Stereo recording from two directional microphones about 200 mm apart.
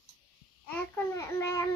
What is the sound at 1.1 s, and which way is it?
Speech, 15° left (ahead or behind).